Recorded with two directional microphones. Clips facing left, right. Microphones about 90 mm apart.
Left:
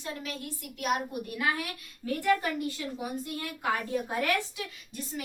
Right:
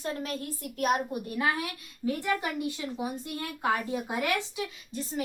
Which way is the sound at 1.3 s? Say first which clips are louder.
Right 2 dB; 30° right (ahead or behind).